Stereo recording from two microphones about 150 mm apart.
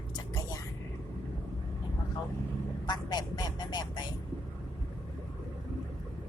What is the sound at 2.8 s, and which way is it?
Speech, 25° left (ahead or behind).